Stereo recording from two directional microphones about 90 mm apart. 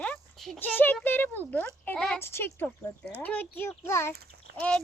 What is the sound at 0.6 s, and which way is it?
A child's voice, 20° left (ahead or behind).